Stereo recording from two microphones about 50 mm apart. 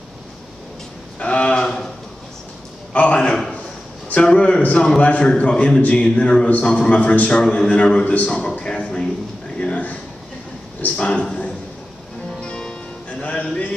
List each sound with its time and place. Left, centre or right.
1.2 s a man's voice: left
2.9 s a man's voice: left
8.0 s a man's voice: left
8.3 s a man's voice: centre
9.6 s a sound: left
11.0 s a man's voice: centre
12.3 s music: centre
13.2 s speech: left